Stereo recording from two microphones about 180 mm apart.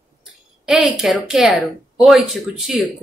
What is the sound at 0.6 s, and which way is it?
Speech, centre (ahead or behind).